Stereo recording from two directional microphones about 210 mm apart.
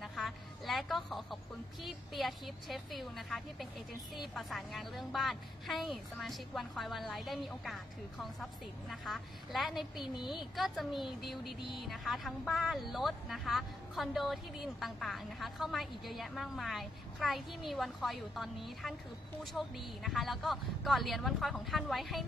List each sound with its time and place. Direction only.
0.0 s a woman's voice: centre (ahead or behind)